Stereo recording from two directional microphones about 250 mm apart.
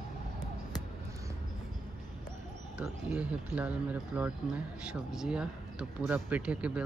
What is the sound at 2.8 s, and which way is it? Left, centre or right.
Speech, centre.